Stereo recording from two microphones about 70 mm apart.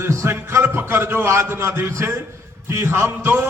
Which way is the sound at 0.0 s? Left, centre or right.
Right.